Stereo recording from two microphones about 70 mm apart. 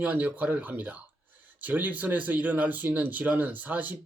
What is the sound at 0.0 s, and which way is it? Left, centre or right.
Speech, right.